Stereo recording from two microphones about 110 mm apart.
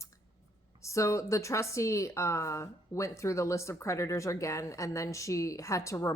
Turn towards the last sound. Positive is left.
turn(degrees=30)  # may be behind; listen again after turning